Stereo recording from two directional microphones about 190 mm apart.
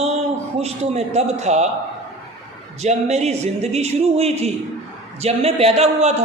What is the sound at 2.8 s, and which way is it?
A man's voice, 35° right (ahead or behind).